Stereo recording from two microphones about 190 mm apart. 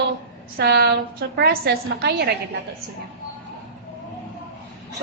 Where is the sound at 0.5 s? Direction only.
60° right (ahead or behind).